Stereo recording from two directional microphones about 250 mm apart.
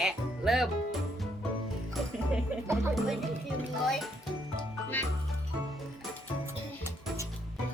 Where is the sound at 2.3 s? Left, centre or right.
Centre.